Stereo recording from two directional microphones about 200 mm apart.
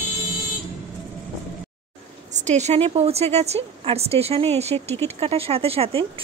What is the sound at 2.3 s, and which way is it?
A woman's voice, 35° right (ahead or behind).